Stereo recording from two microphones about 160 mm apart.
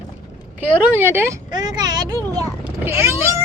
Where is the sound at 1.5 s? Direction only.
25° right (ahead or behind).